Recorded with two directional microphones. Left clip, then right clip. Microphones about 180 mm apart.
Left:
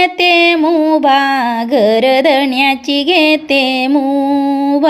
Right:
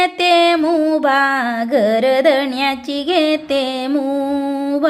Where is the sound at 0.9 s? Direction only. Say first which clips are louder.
Left 4 dB; 15° left (ahead or behind).